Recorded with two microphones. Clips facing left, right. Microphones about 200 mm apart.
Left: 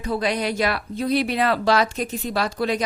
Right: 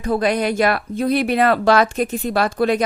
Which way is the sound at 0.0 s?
50° right (ahead or behind).